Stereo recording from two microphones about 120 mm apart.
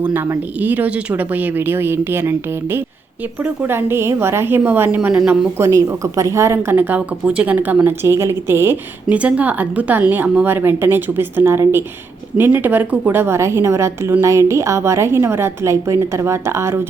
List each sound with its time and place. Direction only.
0.0 s speech: 15° right (ahead or behind)
5.5 s a woman's voice: 25° right (ahead or behind)